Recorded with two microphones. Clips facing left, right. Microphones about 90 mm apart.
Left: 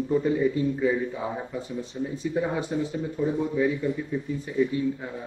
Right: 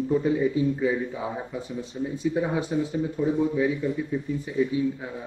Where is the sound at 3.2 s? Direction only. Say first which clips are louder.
Right 1 dB; centre (ahead or behind).